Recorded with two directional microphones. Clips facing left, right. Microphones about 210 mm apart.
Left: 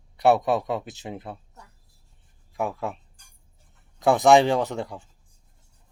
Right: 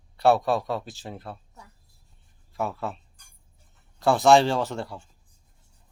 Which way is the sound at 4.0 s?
15° left (ahead or behind).